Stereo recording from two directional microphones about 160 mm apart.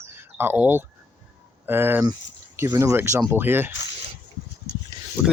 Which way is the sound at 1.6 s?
15° right (ahead or behind).